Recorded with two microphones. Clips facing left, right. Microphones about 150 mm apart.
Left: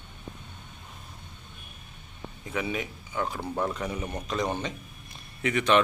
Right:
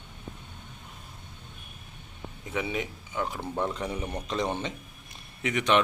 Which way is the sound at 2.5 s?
20° right (ahead or behind).